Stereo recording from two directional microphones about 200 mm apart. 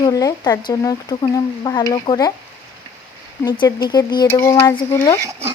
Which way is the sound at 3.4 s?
20° left (ahead or behind).